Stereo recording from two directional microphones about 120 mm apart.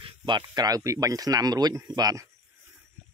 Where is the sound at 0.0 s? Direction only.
40° right (ahead or behind).